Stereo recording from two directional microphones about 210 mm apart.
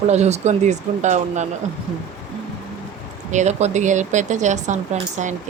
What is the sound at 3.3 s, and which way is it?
Speech, 35° right (ahead or behind).